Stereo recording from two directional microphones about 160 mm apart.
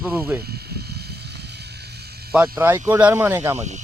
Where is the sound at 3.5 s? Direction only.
45° right (ahead or behind).